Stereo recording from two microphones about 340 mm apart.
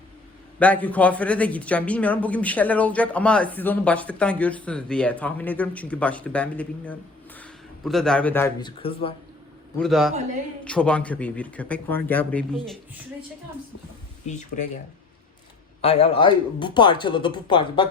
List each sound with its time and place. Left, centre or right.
0.6 s a man's voice: centre
9.7 s speech: centre
14.3 s speech: left
15.8 s speech: centre